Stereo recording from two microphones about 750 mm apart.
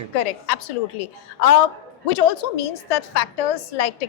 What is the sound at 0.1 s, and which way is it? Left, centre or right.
A woman's voice, left.